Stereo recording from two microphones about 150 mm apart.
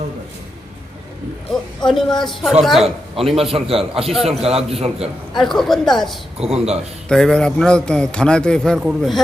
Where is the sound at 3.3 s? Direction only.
40° right (ahead or behind).